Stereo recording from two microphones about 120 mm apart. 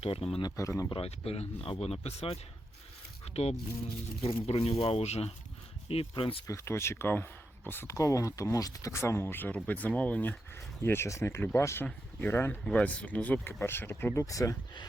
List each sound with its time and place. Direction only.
0.0 s speech: 55° left (ahead or behind)
0.4 s speech: 25° left (ahead or behind)
0.9 s speech: 50° left (ahead or behind)
5.9 s speech: 50° left (ahead or behind)
6.5 s speech: 20° left (ahead or behind)